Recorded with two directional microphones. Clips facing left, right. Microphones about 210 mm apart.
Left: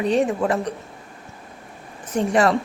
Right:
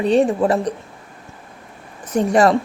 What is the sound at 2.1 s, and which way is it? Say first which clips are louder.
Speech: right 4 dB; 40° right (ahead or behind).